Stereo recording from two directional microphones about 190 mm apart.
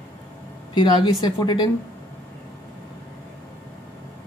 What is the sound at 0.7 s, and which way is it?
Speech, 25° left (ahead or behind).